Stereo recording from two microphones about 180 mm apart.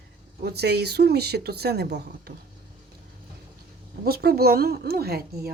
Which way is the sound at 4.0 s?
60° right (ahead or behind).